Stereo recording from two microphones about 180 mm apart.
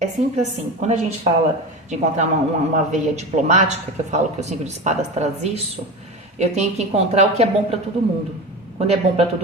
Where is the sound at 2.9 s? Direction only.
40° right (ahead or behind).